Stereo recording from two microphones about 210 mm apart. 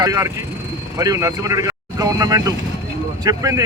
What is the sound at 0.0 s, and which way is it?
Speech, 15° right (ahead or behind).